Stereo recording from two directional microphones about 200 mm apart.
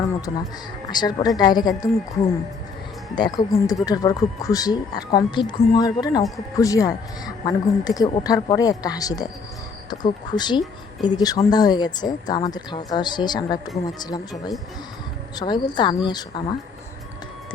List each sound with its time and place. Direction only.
0.3 s a woman's voice: 20° left (ahead or behind)